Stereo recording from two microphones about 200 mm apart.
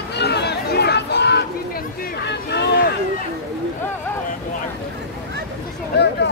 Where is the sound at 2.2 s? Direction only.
55° left (ahead or behind).